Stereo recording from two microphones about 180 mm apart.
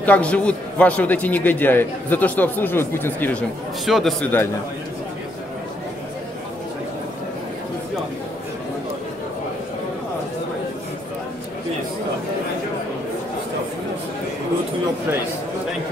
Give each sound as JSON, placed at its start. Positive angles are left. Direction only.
{"t": 0.0, "sound": "a man's voice", "side_deg": 10}
{"t": 3.8, "sound": "a man's voice", "side_deg": 0}